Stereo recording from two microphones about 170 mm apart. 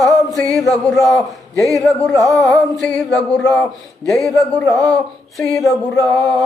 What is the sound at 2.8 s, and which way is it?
Speech, 5° left (ahead or behind).